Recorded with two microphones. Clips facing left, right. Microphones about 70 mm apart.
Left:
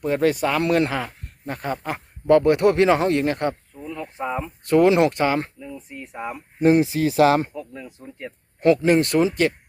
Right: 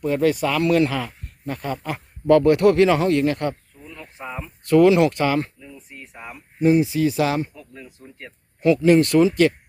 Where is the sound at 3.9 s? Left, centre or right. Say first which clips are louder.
Left 6 dB; centre.